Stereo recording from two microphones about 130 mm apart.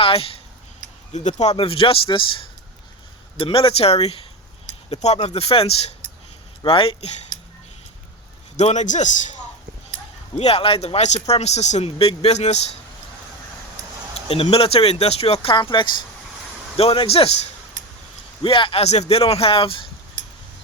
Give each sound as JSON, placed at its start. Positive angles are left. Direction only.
{"t": 0.0, "sound": "a sound", "side_deg": 45}
{"t": 1.1, "sound": "speech", "side_deg": 65}
{"t": 8.5, "sound": "a man's voice", "side_deg": 65}
{"t": 10.3, "sound": "speech", "side_deg": 50}
{"t": 14.3, "sound": "speech", "side_deg": 50}
{"t": 16.7, "sound": "speech", "side_deg": 45}